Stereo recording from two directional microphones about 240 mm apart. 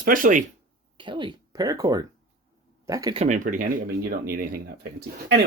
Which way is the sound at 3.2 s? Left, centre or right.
Right.